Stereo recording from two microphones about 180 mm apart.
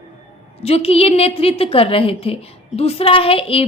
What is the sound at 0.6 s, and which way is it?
A woman's voice, 35° left (ahead or behind).